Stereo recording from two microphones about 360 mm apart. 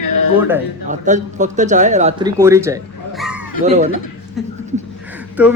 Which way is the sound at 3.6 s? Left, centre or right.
Centre.